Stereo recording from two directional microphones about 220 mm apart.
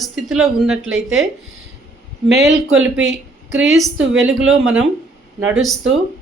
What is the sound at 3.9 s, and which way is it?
Speech, 60° right (ahead or behind).